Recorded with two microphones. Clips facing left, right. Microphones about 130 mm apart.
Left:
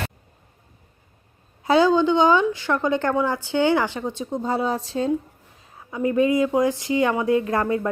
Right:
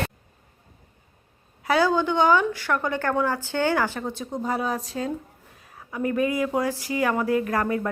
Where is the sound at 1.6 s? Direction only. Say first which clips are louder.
Left 4 dB; 20° left (ahead or behind).